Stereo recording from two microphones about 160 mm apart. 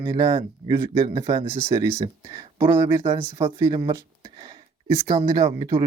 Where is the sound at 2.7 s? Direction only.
15° right (ahead or behind).